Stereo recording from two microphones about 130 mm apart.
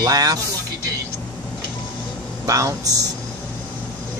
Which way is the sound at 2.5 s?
25° right (ahead or behind).